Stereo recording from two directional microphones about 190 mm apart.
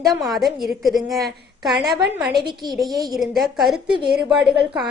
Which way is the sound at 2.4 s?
20° right (ahead or behind).